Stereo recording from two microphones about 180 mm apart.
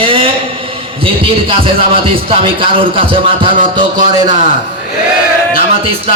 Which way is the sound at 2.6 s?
30° right (ahead or behind).